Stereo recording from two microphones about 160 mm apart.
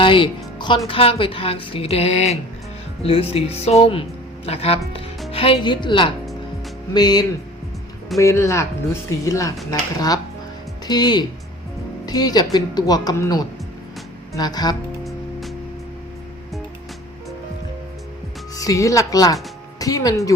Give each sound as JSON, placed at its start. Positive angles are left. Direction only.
{"t": 0.0, "sound": "music", "side_deg": 30}
{"t": 0.9, "sound": "speech", "side_deg": 35}
{"t": 10.8, "sound": "speech", "side_deg": 25}
{"t": 15.0, "sound": "music", "side_deg": 0}
{"t": 18.5, "sound": "speech", "side_deg": 20}